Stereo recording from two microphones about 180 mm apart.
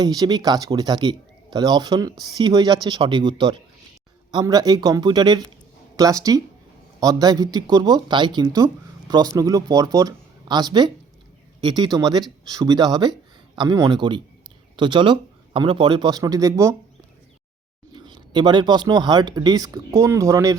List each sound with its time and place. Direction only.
0.0 s speech: 20° right (ahead or behind)
17.9 s speech: 25° right (ahead or behind)